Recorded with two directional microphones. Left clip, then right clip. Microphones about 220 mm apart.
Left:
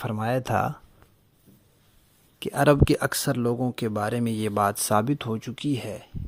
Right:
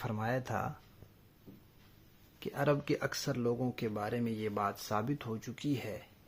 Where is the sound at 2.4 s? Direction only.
45° left (ahead or behind).